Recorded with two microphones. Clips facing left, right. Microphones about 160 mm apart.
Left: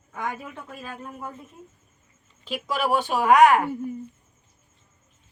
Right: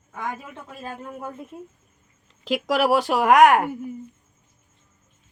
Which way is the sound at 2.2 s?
90° right.